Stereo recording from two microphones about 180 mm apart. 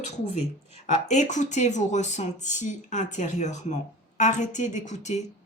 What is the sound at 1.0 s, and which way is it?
A woman's voice, 40° left (ahead or behind).